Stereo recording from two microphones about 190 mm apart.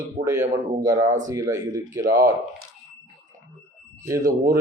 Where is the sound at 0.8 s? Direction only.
20° right (ahead or behind).